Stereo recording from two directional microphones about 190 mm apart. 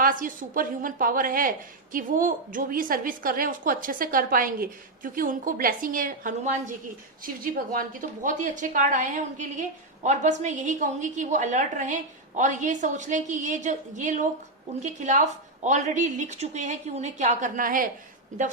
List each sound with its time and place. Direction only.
0.0 s a woman's voice: 45° right (ahead or behind)